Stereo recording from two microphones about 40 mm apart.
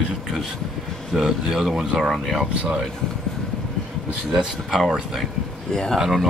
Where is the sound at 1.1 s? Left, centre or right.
Centre.